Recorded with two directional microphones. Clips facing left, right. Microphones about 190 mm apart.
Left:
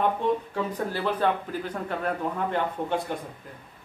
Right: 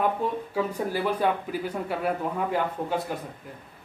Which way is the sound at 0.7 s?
10° right (ahead or behind).